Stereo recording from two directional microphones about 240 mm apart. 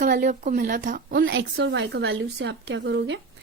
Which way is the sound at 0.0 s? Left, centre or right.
Right.